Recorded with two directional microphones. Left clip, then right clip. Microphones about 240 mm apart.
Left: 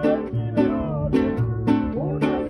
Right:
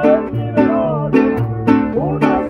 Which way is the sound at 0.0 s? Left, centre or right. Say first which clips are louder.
Right 9 dB; left.